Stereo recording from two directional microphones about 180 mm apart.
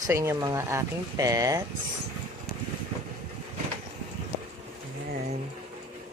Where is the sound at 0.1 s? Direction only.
15° right (ahead or behind).